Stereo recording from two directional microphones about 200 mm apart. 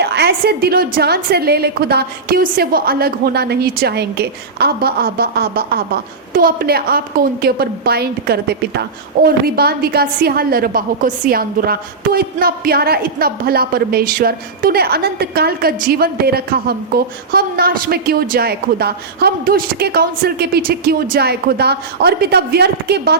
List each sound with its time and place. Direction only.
0.0 s a woman's voice: 55° right (ahead or behind)